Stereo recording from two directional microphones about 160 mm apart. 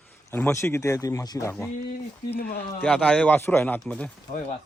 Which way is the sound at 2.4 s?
70° left (ahead or behind).